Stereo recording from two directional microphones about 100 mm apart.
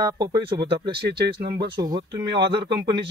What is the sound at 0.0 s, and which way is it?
Speech, 40° right (ahead or behind).